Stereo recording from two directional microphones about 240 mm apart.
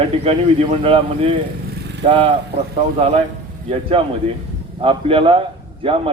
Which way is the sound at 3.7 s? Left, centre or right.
Right.